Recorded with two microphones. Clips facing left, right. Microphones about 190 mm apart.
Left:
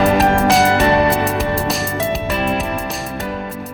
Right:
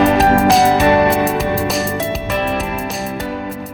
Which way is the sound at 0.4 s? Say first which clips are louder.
Right 2 dB; centre (ahead or behind).